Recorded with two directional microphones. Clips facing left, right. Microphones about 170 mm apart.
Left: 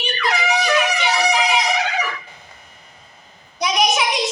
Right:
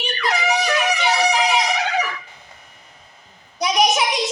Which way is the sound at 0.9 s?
40° right (ahead or behind).